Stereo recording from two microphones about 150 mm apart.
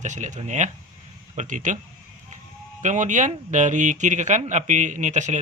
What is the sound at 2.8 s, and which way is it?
Speech, 55° right (ahead or behind).